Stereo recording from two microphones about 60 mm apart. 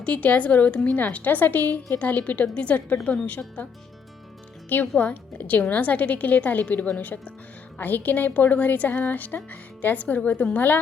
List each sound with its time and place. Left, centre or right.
0.0 s a woman's voice: left
4.7 s a woman's voice: left